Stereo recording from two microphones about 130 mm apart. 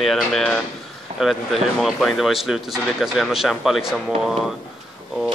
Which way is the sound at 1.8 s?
Centre (ahead or behind).